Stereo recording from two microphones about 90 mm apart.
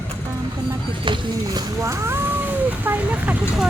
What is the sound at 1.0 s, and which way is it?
Speech, 65° right (ahead or behind).